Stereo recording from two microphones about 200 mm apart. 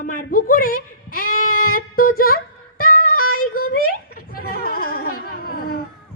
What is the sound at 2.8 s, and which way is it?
Music, 45° left (ahead or behind).